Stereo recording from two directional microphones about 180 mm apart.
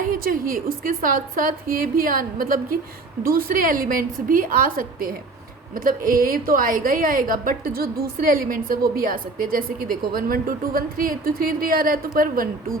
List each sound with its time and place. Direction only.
0.1 s a woman's voice: 50° right (ahead or behind)